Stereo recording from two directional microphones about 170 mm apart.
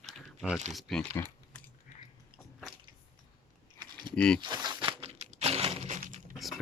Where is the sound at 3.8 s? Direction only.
25° right (ahead or behind).